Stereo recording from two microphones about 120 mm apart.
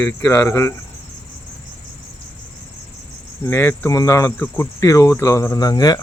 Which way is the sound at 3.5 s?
20° left (ahead or behind).